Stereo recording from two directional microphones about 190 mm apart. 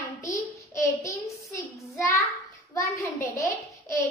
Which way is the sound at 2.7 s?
15° left (ahead or behind).